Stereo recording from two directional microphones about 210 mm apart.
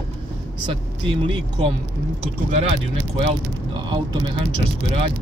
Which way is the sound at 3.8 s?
20° right (ahead or behind).